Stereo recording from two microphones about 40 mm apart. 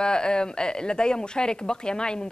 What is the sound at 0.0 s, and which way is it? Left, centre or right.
Speech, left.